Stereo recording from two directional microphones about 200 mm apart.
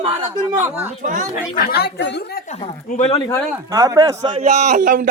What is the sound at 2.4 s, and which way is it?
Speech, 35° left (ahead or behind).